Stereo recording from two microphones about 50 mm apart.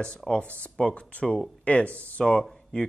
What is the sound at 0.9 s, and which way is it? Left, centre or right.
Speech, left.